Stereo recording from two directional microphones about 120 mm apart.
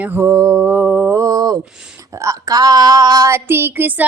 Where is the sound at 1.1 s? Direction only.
25° right (ahead or behind).